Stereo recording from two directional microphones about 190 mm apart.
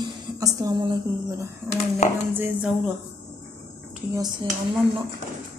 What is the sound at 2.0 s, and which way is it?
Speech, 35° left (ahead or behind).